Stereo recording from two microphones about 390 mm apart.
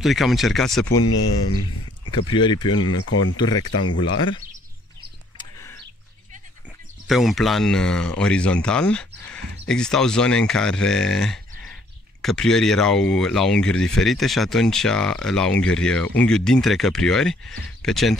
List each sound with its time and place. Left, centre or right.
0.0 s speech: centre
0.9 s speech: left
2.0 s speech: centre
2.7 s speech: left
3.3 s speech: centre
3.8 s speech: left
5.4 s a sound: centre
7.1 s speech: centre